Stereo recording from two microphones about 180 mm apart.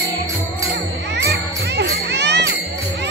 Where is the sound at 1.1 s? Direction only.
75° right (ahead or behind).